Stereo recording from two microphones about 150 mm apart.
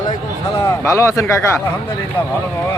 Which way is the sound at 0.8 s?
20° left (ahead or behind).